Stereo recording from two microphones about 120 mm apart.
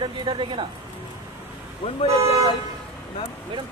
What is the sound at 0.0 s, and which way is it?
Speech, 45° right (ahead or behind).